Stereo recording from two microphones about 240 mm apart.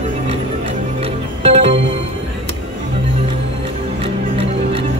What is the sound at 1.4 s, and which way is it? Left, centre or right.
Music, right.